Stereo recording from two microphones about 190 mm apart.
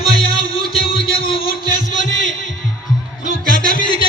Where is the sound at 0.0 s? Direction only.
30° left (ahead or behind).